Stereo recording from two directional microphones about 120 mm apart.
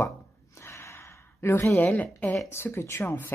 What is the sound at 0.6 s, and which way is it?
Gasp, 25° left (ahead or behind).